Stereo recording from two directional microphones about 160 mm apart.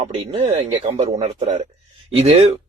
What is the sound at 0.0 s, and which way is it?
A man's voice, 40° right (ahead or behind).